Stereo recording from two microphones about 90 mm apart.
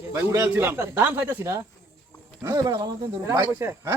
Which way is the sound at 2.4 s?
40° right (ahead or behind).